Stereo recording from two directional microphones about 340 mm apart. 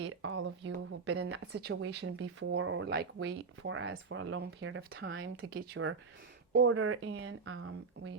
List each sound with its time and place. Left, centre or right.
0.0 s speech: right